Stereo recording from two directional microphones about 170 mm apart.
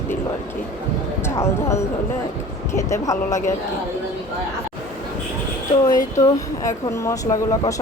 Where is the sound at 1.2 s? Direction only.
15° left (ahead or behind).